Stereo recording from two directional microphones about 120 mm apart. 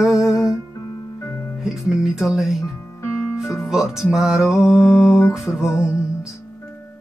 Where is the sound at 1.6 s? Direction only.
5° right (ahead or behind).